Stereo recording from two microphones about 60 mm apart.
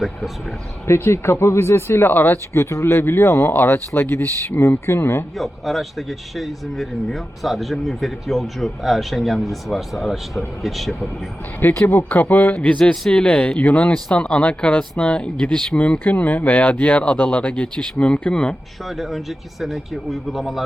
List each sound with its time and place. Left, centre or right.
0.9 s speech: left
2.5 s speech: left
3.5 s speech: left
5.4 s speech: centre
11.9 s speech: left
12.7 s speech: centre
16.0 s speech: left
18.9 s speech: centre